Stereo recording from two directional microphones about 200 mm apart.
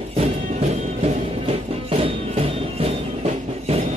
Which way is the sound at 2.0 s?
30° right (ahead or behind).